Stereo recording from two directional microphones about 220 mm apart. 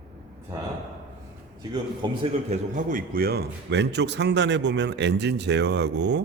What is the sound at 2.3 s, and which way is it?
A man's voice, 35° right (ahead or behind).